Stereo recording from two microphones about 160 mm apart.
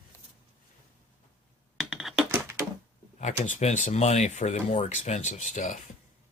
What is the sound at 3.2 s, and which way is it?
Speech, 50° left (ahead or behind).